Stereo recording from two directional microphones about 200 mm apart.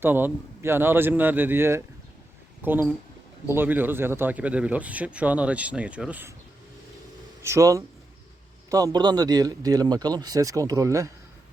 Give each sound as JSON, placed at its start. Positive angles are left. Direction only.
{"t": 0.0, "sound": "speech", "side_deg": -10}
{"t": 7.4, "sound": "speech", "side_deg": -15}